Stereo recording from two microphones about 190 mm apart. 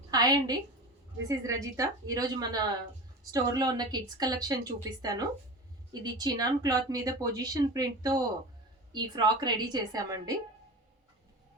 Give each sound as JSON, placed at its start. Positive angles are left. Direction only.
{"t": 0.1, "sound": "a woman's voice", "side_deg": -20}